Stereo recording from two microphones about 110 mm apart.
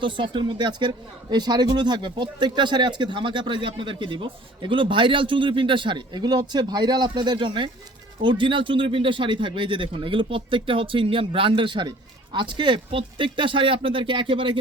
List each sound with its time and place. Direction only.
0.0 s speech: 50° right (ahead or behind)